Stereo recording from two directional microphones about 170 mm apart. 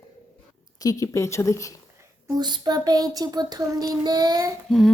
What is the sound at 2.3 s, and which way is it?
Child singing, 25° right (ahead or behind).